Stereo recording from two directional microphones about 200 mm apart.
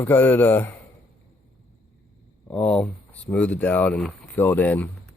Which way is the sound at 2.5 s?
5° left (ahead or behind).